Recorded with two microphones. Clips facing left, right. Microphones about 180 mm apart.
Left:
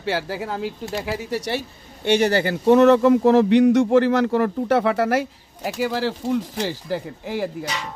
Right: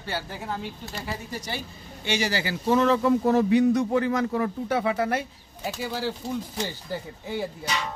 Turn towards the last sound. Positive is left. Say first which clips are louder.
# left 5 dB
turn(degrees=90)